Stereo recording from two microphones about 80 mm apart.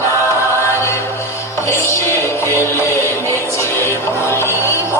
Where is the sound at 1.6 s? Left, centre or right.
Left.